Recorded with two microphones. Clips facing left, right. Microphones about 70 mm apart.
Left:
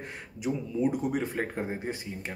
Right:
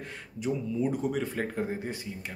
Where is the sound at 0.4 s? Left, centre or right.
Centre.